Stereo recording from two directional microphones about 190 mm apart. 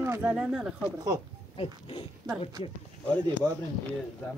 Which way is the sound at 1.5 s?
30° left (ahead or behind).